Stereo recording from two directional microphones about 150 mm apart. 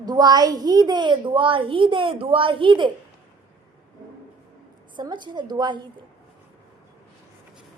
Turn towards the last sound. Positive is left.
turn(degrees=-30)  # may be behind; listen again after turning